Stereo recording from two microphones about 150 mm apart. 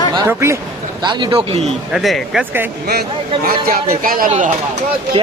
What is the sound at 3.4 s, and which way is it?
Speech, 70° right (ahead or behind).